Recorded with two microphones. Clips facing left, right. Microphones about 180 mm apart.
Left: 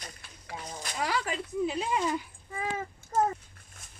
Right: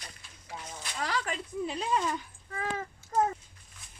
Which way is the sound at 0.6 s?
40° left (ahead or behind).